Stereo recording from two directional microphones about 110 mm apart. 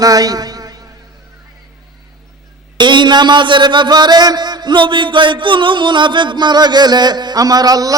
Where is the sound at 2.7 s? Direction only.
45° right (ahead or behind).